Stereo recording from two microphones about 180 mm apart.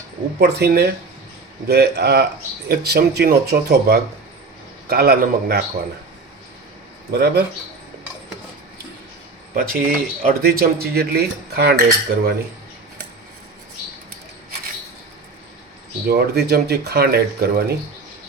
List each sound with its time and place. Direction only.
0.3 s speech: 65° right (ahead or behind)
7.1 s speech: 65° right (ahead or behind)
9.6 s speech: 50° right (ahead or behind)
16.0 s speech: 60° right (ahead or behind)